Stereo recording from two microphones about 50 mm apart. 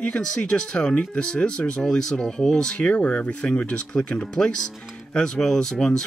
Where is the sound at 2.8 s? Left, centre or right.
Left.